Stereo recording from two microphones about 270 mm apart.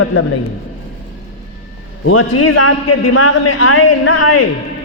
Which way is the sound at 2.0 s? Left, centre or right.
Left.